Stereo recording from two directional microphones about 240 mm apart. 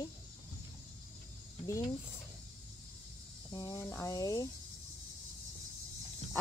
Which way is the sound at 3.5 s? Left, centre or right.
Centre.